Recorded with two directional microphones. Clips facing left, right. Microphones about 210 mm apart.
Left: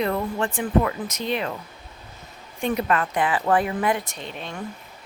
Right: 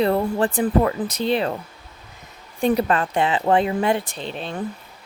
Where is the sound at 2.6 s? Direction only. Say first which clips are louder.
Right 4 dB; 35° right (ahead or behind).